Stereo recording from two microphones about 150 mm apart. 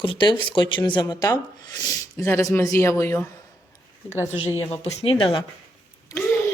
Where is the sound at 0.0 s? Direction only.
35° left (ahead or behind).